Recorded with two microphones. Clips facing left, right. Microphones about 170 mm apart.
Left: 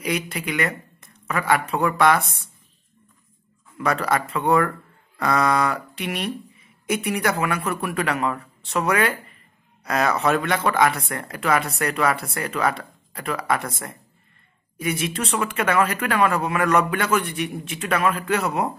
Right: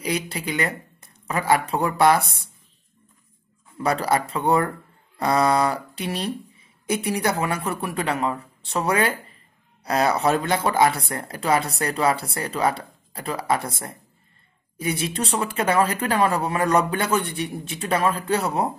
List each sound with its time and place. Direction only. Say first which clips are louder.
0.0 s speech: even; 35° right (ahead or behind)
3.7 s speech: right 1 dB; 30° right (ahead or behind)